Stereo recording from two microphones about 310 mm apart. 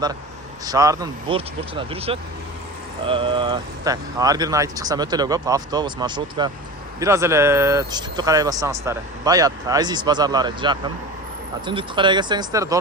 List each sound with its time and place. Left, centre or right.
0.6 s speech: centre